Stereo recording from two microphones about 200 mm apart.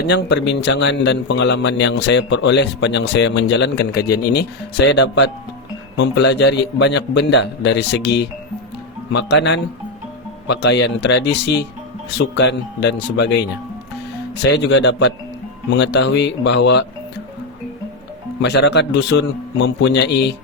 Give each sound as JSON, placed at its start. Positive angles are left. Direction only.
{"t": 0.0, "sound": "a man's voice", "side_deg": 60}
{"t": 18.4, "sound": "a man's voice", "side_deg": 60}